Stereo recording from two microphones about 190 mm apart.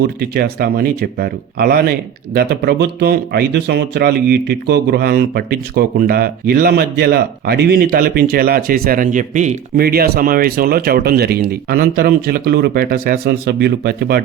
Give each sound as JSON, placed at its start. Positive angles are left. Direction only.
{"t": 0.2, "sound": "speech", "side_deg": -55}
{"t": 9.8, "sound": "speech", "side_deg": -55}